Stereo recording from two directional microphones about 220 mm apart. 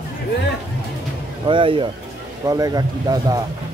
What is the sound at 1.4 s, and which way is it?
Speech, 25° right (ahead or behind).